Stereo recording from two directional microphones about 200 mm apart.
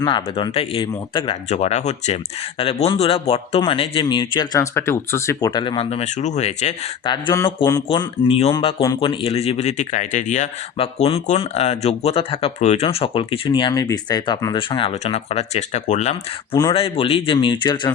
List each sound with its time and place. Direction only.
0.0 s speech: 25° left (ahead or behind)
7.1 s speech: 20° left (ahead or behind)
7.9 s speech: 30° left (ahead or behind)
16.6 s speech: 25° left (ahead or behind)